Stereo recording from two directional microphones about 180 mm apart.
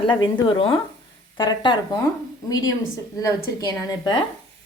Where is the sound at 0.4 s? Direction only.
30° left (ahead or behind).